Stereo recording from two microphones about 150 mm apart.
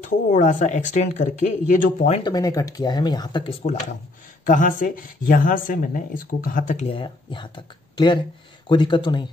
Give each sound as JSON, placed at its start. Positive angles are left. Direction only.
{"t": 0.0, "sound": "speech", "side_deg": 55}
{"t": 2.2, "sound": "speech", "side_deg": 25}
{"t": 3.6, "sound": "speech", "side_deg": 50}
{"t": 4.5, "sound": "speech", "side_deg": 60}
{"t": 6.9, "sound": "speech", "side_deg": 35}